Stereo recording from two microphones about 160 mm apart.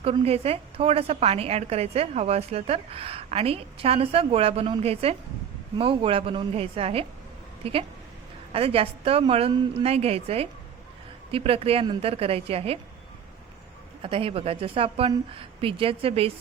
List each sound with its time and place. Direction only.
0.0 s a woman's voice: 40° right (ahead or behind)
14.0 s a woman's voice: 35° right (ahead or behind)